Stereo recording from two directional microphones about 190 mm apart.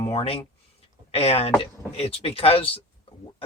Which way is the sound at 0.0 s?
30° left (ahead or behind).